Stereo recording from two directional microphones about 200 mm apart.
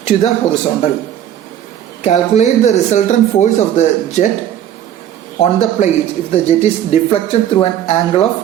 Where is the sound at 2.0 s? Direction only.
35° left (ahead or behind).